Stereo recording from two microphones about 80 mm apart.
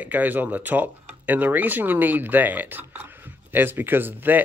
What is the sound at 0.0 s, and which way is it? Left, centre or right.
Speech, right.